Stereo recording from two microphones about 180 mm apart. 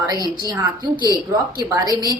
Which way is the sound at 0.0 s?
20° right (ahead or behind).